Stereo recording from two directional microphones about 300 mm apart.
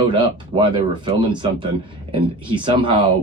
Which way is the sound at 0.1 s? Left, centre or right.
Centre.